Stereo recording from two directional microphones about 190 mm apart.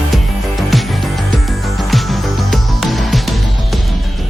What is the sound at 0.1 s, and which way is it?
Music, centre (ahead or behind).